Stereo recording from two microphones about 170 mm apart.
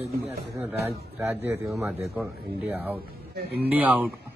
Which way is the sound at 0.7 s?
15° right (ahead or behind).